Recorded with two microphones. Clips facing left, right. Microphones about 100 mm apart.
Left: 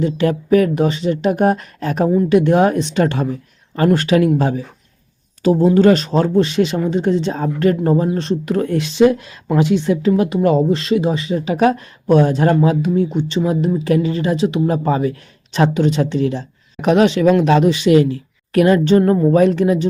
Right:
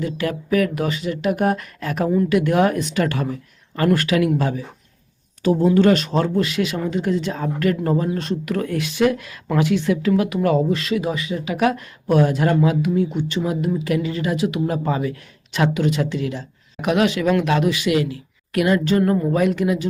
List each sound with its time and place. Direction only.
0.0 s speech: 30° left (ahead or behind)